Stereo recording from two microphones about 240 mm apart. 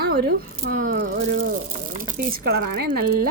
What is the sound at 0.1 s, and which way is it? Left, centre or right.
Speech, right.